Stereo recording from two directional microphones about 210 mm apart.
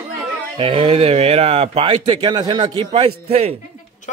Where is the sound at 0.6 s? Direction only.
25° right (ahead or behind).